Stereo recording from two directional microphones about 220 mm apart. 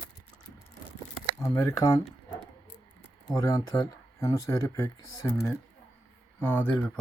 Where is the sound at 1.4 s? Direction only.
15° left (ahead or behind).